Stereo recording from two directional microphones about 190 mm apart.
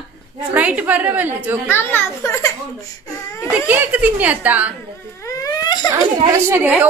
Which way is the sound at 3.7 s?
10° right (ahead or behind).